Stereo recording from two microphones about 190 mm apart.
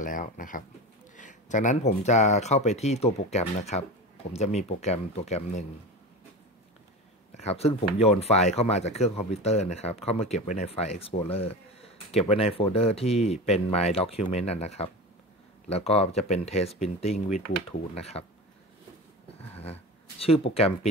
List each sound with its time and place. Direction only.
0.0 s speech: 45° left (ahead or behind)
7.3 s speech: 35° left (ahead or behind)
20.2 s speech: 30° left (ahead or behind)